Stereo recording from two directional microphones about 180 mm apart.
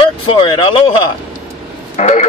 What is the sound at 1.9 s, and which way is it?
Speech, 40° left (ahead or behind).